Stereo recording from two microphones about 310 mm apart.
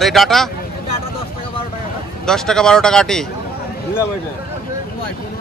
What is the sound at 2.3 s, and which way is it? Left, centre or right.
Speech, centre.